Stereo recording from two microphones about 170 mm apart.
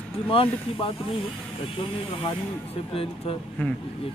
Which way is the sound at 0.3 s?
30° left (ahead or behind).